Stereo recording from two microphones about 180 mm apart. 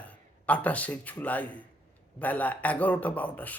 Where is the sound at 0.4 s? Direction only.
5° left (ahead or behind).